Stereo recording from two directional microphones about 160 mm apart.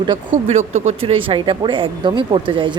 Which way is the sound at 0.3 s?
45° right (ahead or behind).